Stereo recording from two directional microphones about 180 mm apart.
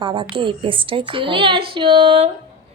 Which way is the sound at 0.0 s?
25° right (ahead or behind).